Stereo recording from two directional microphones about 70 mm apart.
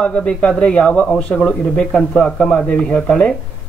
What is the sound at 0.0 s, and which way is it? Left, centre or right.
Speech, centre.